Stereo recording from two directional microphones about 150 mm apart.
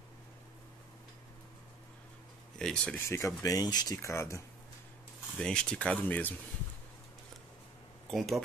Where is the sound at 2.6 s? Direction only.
5° left (ahead or behind).